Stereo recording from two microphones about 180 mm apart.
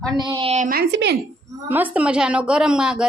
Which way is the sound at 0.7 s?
65° right (ahead or behind).